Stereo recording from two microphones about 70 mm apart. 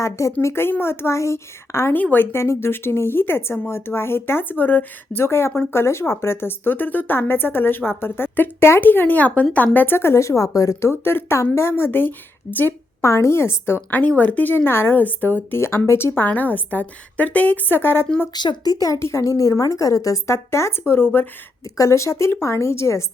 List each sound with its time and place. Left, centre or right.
0.0 s a woman's voice: left
0.4 s speech: left
2.0 s speech: left
2.3 s speech: left
9.7 s a woman's voice: left
10.8 s speech: left
13.0 s speech: left
14.0 s speech: left
18.3 s speech: left
18.9 s a woman's voice: left
20.3 s speech: left
21.8 s a woman's voice: left